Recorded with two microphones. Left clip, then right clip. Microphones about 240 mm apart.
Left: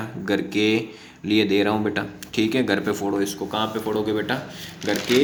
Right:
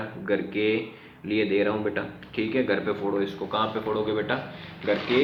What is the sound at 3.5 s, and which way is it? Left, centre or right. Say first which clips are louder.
Speech: even; left.